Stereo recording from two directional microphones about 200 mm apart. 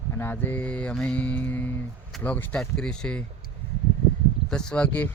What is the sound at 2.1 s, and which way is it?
Speech, 10° left (ahead or behind).